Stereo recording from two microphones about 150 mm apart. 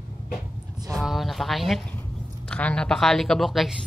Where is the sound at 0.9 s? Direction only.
Centre (ahead or behind).